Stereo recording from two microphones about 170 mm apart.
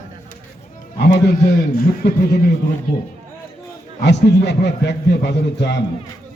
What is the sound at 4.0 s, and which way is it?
A man's voice, 85° left.